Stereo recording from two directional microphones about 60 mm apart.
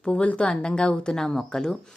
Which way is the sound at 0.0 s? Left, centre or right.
Centre.